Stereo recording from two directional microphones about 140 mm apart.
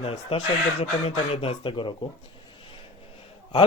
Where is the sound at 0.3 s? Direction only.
40° left (ahead or behind).